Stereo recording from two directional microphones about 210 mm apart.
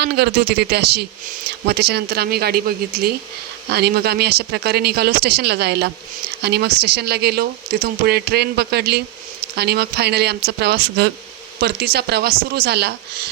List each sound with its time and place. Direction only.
0.0 s speech: 50° right (ahead or behind)